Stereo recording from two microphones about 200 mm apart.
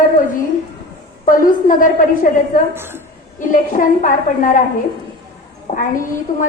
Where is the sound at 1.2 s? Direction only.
40° left (ahead or behind).